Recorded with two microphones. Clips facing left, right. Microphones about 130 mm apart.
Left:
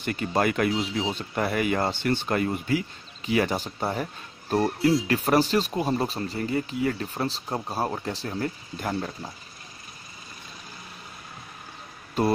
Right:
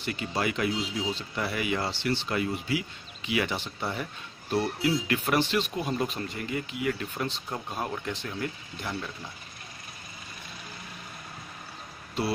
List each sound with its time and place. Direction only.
0.0 s speech: 50° left (ahead or behind)
12.2 s speech: 45° left (ahead or behind)